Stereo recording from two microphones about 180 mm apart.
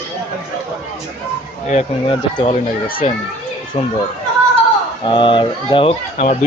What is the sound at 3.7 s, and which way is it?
Speech, 30° left (ahead or behind).